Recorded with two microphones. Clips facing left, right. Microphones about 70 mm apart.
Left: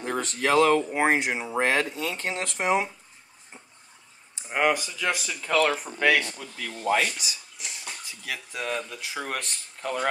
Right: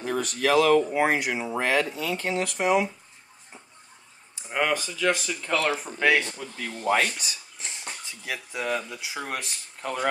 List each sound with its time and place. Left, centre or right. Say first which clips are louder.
0.0 s speech: right 1 dB; left
4.5 s speech: left 2 dB; centre
7.2 s a sound: even; right
7.8 s speech: right 1 dB; centre